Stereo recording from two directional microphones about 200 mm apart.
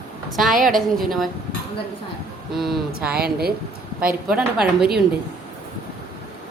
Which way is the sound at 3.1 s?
50° right (ahead or behind).